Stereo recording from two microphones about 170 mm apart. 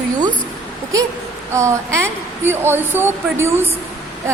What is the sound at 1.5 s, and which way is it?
A woman's voice, 15° right (ahead or behind).